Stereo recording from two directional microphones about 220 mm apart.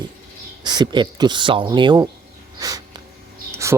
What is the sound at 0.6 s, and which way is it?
Speech, 20° right (ahead or behind).